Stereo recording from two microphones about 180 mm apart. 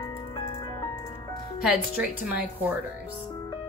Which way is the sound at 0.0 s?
20° left (ahead or behind).